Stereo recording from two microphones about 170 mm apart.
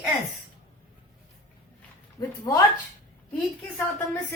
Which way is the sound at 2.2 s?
20° left (ahead or behind).